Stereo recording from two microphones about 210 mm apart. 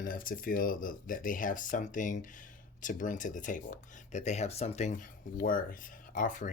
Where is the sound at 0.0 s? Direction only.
40° left (ahead or behind).